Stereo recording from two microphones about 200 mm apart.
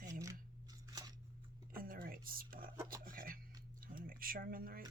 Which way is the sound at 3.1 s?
45° right (ahead or behind).